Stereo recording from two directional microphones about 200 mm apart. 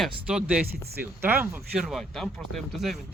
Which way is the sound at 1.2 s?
10° right (ahead or behind).